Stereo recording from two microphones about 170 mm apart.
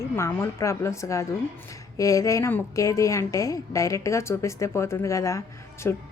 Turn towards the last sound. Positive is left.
turn(degrees=15)  # may be behind; listen again after turning